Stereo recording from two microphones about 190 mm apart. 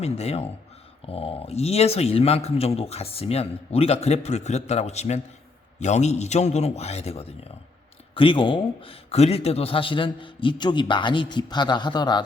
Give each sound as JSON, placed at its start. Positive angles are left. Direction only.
{"t": 0.0, "sound": "speech", "side_deg": 35}